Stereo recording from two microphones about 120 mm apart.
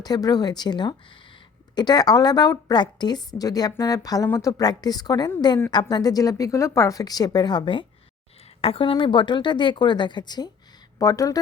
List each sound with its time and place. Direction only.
0.0 s speech: 35° left (ahead or behind)